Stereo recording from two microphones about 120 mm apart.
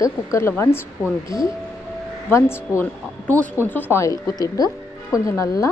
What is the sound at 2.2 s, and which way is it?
A woman's voice, 20° left (ahead or behind).